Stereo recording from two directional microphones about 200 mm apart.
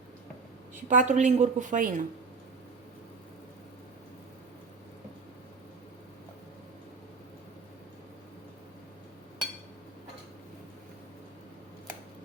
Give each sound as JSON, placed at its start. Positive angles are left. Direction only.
{"t": 0.9, "sound": "a woman's voice", "side_deg": -35}